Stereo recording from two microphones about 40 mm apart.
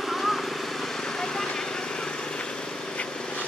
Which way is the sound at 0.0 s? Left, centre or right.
Centre.